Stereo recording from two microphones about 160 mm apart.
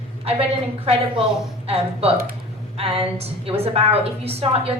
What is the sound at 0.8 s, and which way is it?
Speech, 35° right (ahead or behind).